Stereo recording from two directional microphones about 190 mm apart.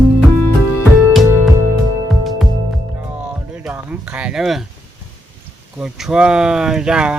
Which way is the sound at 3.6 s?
5° right (ahead or behind).